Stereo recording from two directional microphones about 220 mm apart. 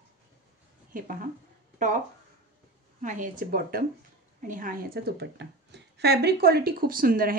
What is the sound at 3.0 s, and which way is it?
Speech, 35° right (ahead or behind).